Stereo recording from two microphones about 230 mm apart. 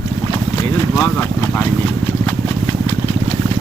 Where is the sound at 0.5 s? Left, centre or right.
Centre.